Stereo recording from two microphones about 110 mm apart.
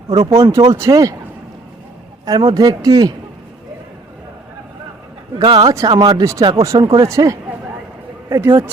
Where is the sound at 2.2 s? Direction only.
45° right (ahead or behind).